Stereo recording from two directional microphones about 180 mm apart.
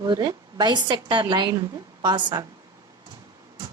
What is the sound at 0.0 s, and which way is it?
A woman's voice, 20° right (ahead or behind).